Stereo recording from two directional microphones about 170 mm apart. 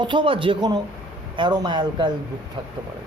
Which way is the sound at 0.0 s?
30° right (ahead or behind).